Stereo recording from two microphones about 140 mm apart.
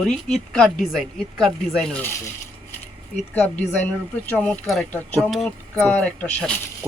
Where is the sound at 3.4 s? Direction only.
10° left (ahead or behind).